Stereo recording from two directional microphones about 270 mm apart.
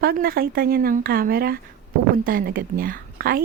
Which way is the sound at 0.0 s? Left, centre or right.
Right.